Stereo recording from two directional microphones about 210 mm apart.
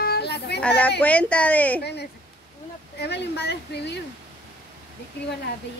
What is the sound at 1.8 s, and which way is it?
Speech, 50° left (ahead or behind).